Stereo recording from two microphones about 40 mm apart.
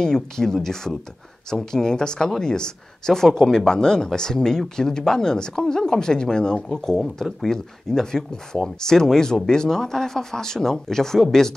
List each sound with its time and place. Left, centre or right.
0.0 s speech: centre